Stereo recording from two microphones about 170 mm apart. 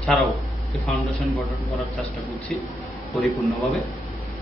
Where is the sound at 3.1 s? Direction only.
Centre (ahead or behind).